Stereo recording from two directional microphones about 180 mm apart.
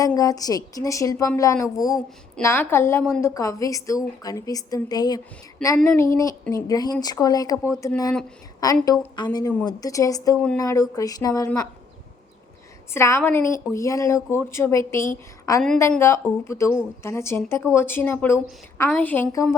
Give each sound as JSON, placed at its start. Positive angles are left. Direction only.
{"t": 0.0, "sound": "a woman's voice", "side_deg": 20}
{"t": 12.9, "sound": "a woman's voice", "side_deg": 15}